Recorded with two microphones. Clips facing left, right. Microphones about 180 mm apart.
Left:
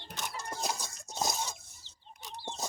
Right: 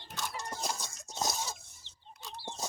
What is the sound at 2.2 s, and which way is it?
Bird, 15° left (ahead or behind).